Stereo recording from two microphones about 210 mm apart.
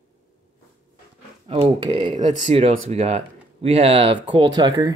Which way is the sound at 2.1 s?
35° right (ahead or behind).